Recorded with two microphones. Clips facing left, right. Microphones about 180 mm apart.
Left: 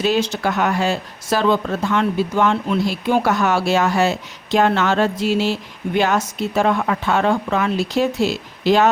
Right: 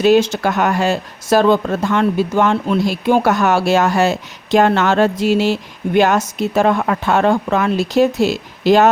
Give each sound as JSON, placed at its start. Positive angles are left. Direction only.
{"t": 0.0, "sound": "speech", "side_deg": -45}